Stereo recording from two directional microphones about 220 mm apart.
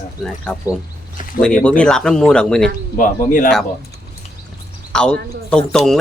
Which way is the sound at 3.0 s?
40° left (ahead or behind).